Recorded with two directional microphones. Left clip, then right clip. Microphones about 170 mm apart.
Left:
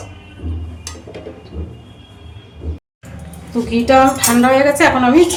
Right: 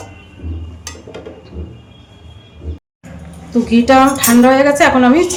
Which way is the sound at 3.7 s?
35° right (ahead or behind).